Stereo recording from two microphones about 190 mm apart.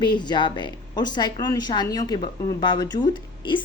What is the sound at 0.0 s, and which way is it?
A woman's voice, 25° left (ahead or behind).